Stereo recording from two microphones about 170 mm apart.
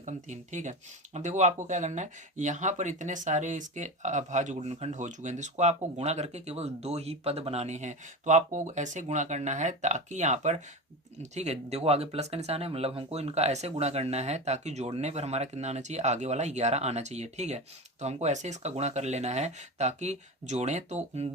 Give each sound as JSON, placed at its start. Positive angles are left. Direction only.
{"t": 0.0, "sound": "speech", "side_deg": -45}